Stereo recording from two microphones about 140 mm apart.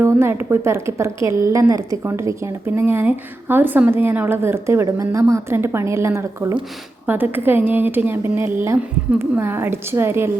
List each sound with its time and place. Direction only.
0.0 s a woman's voice: 15° right (ahead or behind)